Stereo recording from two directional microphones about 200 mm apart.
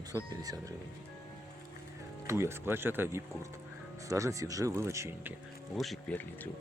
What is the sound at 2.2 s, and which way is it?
A man's voice, 15° right (ahead or behind).